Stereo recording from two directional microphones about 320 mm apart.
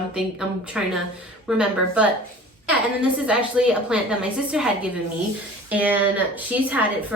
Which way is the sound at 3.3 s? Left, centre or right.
Centre.